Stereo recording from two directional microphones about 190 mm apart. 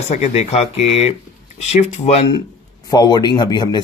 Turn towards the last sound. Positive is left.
turn(degrees=25)  # may be behind; listen again after turning